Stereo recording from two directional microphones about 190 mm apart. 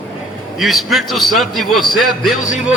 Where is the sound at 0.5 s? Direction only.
Centre (ahead or behind).